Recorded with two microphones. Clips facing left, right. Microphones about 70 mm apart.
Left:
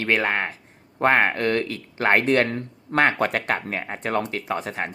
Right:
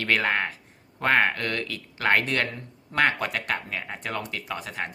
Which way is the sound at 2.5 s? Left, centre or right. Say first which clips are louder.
Left 9 dB; left.